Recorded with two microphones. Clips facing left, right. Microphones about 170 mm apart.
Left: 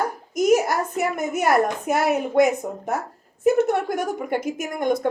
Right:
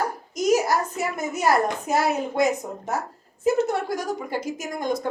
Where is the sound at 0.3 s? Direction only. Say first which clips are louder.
Left 2 dB; 55° left (ahead or behind).